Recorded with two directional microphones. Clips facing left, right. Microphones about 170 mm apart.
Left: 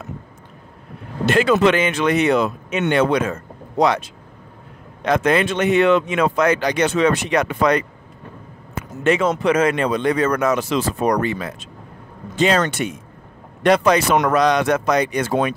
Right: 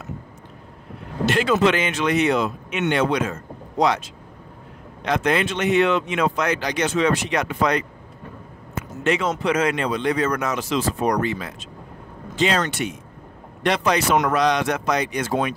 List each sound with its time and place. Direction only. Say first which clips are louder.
1.2 s speech: left 3 dB; 55° left (ahead or behind)
5.0 s speech: left 4 dB; 50° left (ahead or behind)
9.0 s speech: left 4 dB; 50° left (ahead or behind)